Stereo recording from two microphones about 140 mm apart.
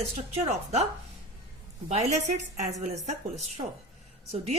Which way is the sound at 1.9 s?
55° right (ahead or behind).